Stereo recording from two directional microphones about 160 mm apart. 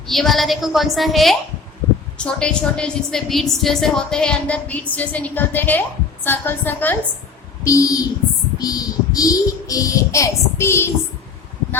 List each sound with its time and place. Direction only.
0.1 s a woman's voice: centre (ahead or behind)